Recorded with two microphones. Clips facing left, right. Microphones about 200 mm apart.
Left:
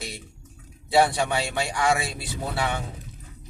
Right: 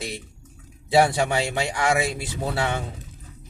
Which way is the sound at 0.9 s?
25° right (ahead or behind).